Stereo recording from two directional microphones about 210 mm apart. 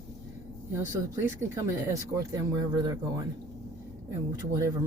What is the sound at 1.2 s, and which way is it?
Speech, 10° right (ahead or behind).